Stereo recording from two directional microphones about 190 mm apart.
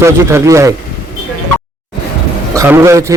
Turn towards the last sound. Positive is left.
turn(degrees=-15)  # may be behind; listen again after turning